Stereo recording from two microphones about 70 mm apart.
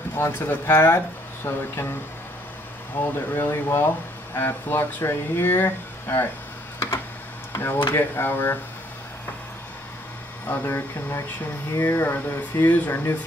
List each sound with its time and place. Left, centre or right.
0.2 s speech: left
3.0 s speech: left
7.5 s speech: left
10.4 s speech: left